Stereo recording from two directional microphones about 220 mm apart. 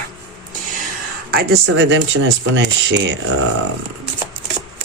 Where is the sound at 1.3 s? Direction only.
45° right (ahead or behind).